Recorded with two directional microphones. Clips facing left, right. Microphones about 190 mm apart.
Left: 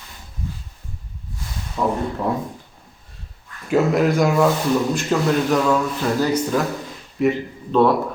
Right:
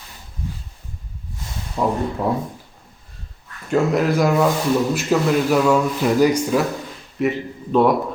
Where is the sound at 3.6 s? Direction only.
5° left (ahead or behind).